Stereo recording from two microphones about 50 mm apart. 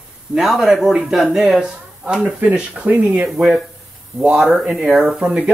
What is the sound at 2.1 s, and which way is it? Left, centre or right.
Speech, right.